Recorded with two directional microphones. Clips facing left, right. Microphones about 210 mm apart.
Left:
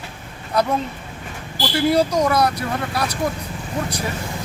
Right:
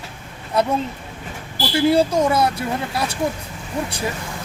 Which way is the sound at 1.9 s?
25° right (ahead or behind).